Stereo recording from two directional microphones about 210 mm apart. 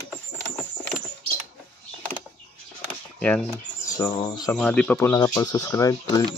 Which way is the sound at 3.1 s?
5° left (ahead or behind).